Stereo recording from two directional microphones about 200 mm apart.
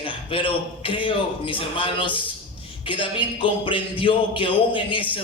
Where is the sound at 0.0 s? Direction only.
25° left (ahead or behind).